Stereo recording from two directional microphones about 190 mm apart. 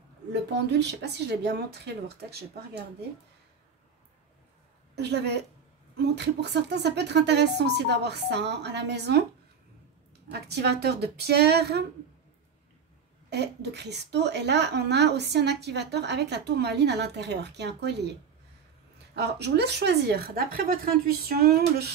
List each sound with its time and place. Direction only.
0.3 s a woman's voice: 65° right (ahead or behind)
4.9 s a woman's voice: 60° right (ahead or behind)
10.3 s a woman's voice: 60° right (ahead or behind)
13.3 s a woman's voice: 60° right (ahead or behind)
19.1 s a woman's voice: 60° right (ahead or behind)